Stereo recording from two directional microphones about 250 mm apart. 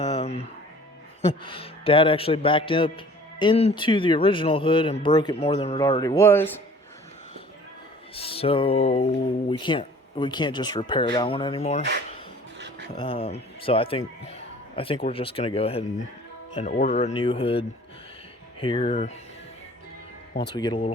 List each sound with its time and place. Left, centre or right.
0.0 s music: left
1.4 s speech: left
8.1 s speech: left
12.5 s music: right
13.0 s speech: left
20.6 s speech: centre